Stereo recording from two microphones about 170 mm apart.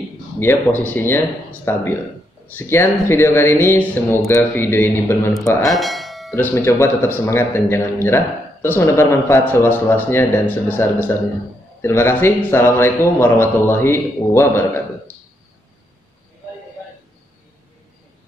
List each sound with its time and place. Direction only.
0.4 s a man's voice: 10° left (ahead or behind)
5.7 s doorbell: centre (ahead or behind)
6.3 s a man's voice: 15° left (ahead or behind)